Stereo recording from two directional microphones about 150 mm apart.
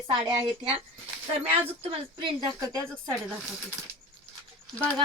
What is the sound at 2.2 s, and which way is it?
Speech, 25° right (ahead or behind).